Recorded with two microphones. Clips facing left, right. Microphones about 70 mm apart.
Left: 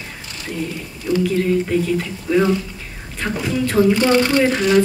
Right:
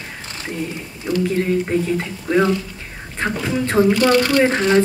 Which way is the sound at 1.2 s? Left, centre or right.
Right.